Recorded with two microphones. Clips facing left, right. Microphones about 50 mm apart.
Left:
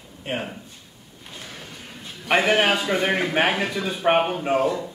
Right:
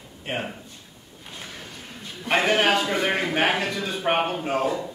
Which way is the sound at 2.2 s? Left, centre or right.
Centre.